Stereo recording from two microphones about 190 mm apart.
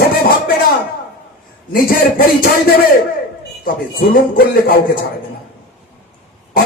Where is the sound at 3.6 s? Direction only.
50° left (ahead or behind).